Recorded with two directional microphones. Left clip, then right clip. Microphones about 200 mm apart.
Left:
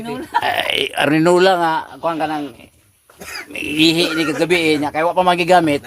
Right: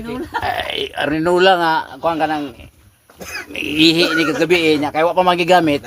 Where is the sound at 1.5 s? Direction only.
5° left (ahead or behind).